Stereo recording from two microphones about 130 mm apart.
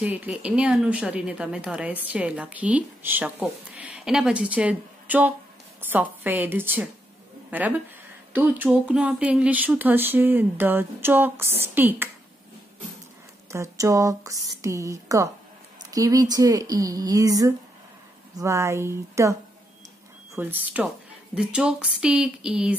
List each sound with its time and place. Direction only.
0.0 s a woman's voice: 10° right (ahead or behind)
13.5 s speech: 20° right (ahead or behind)
20.3 s a woman's voice: 15° right (ahead or behind)